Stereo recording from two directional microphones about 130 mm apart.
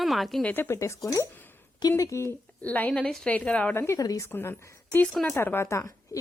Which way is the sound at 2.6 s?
10° left (ahead or behind).